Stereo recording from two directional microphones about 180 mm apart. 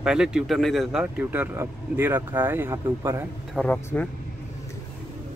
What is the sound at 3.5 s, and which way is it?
Speech, 5° left (ahead or behind).